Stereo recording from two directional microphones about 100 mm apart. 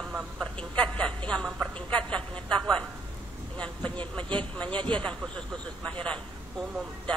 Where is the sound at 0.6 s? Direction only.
10° left (ahead or behind).